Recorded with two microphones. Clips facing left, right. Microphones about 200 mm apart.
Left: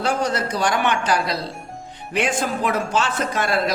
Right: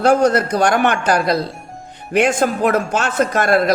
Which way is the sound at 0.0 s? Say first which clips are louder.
Right 9 dB; 50° right (ahead or behind).